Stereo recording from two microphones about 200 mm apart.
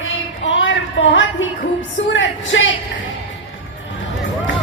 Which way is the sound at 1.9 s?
70° left (ahead or behind).